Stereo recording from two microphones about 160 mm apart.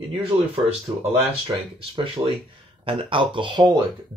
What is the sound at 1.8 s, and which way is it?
Speech, 35° right (ahead or behind).